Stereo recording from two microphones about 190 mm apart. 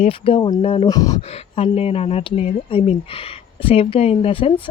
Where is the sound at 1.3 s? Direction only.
35° left (ahead or behind).